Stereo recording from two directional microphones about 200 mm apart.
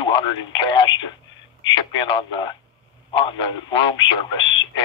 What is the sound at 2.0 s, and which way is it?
Speech, 20° left (ahead or behind).